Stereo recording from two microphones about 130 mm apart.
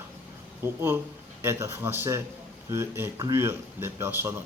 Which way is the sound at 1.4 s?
20° right (ahead or behind).